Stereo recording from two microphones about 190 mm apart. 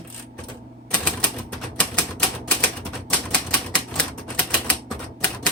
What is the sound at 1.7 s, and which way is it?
Typewriter, 5° left (ahead or behind).